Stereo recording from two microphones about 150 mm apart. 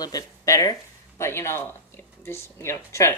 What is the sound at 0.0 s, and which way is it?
Speech, 25° left (ahead or behind).